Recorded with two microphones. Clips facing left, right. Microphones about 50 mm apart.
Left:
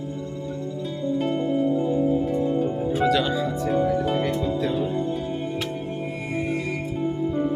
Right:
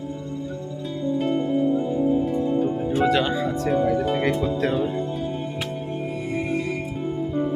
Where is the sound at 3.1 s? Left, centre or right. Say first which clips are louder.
Right 1 dB; right.